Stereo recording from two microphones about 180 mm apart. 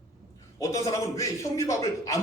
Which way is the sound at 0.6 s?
20° left (ahead or behind).